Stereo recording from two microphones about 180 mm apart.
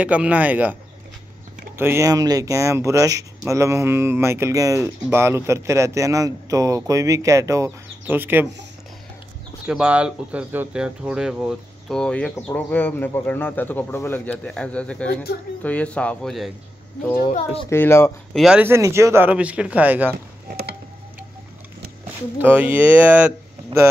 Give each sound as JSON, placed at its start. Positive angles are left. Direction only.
{"t": 0.0, "sound": "speech", "side_deg": -5}
{"t": 1.8, "sound": "speech", "side_deg": -15}
{"t": 9.7, "sound": "speech", "side_deg": -5}
{"t": 17.6, "sound": "speech", "side_deg": 15}
{"t": 18.3, "sound": "speech", "side_deg": -5}
{"t": 20.4, "sound": "a sound", "side_deg": -55}
{"t": 22.4, "sound": "speech", "side_deg": -10}